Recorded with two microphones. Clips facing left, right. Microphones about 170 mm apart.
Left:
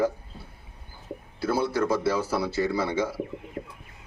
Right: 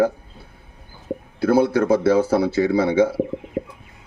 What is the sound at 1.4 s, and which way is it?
A man's voice, 55° right (ahead or behind).